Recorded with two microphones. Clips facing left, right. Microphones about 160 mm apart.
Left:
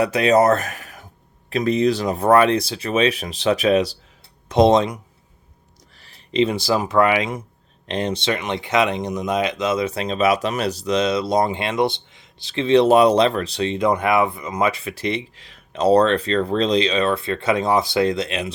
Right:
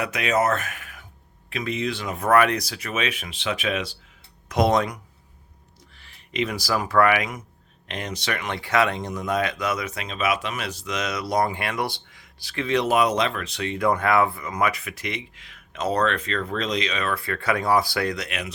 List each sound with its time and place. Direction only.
0.0 s speech: 35° left (ahead or behind)
4.4 s speech: 25° left (ahead or behind)
5.9 s speech: 35° left (ahead or behind)